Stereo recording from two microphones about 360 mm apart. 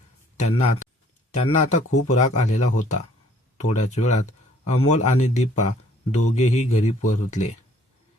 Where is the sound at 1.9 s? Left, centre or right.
Left.